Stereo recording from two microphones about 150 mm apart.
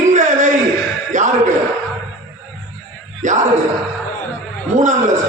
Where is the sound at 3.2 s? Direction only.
60° right (ahead or behind).